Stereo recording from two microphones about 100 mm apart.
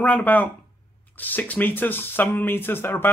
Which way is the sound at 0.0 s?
15° left (ahead or behind).